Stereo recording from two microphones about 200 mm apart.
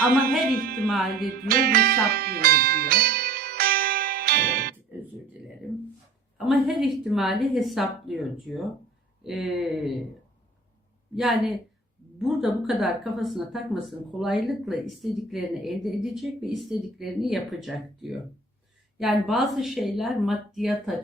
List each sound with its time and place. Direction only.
0.1 s speech: 45° right (ahead or behind)
1.5 s music: 45° right (ahead or behind)
6.3 s speech: centre (ahead or behind)
11.1 s speech: centre (ahead or behind)